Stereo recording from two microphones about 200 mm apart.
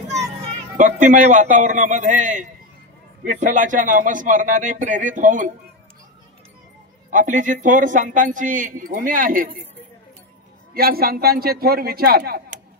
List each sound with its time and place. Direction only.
0.5 s a man's voice: 40° right (ahead or behind)
7.1 s speech: 40° right (ahead or behind)
10.7 s a man's voice: 50° right (ahead or behind)